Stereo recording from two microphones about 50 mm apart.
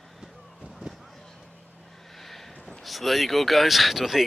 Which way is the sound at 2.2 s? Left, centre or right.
Centre.